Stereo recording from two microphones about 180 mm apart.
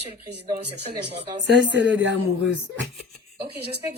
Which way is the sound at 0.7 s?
65° right (ahead or behind).